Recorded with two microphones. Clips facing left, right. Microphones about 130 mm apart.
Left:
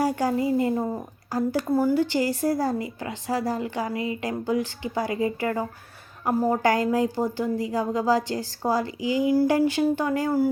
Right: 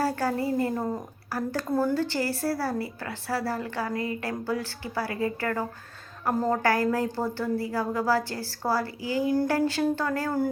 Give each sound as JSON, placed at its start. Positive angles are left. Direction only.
{"t": 0.0, "sound": "a woman's voice", "side_deg": 15}